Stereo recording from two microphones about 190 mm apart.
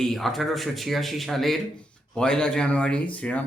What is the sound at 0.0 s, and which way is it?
Speech, centre (ahead or behind).